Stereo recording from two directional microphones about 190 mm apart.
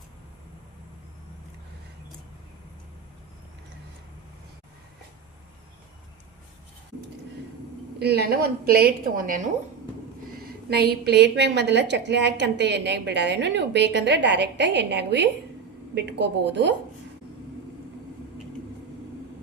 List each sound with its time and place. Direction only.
7.9 s a woman's voice: 60° right (ahead or behind)
10.7 s a woman's voice: 60° right (ahead or behind)